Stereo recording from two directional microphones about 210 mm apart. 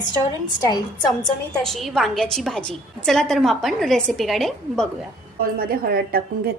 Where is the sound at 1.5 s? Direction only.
Centre (ahead or behind).